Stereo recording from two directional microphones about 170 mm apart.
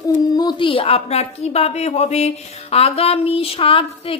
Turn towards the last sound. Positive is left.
turn(degrees=30)  # may be behind; listen again after turning